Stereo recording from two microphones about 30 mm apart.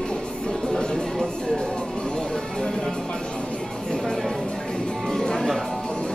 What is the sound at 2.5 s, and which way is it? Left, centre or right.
Music, centre.